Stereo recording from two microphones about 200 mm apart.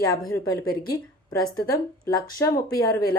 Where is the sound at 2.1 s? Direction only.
20° left (ahead or behind).